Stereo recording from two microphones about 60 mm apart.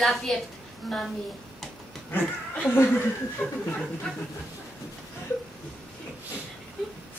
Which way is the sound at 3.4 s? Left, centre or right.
Left.